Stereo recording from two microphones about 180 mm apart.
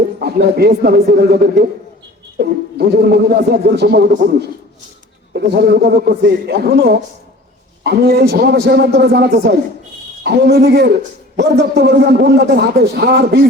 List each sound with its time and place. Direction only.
0.2 s a man's voice: 65° right (ahead or behind)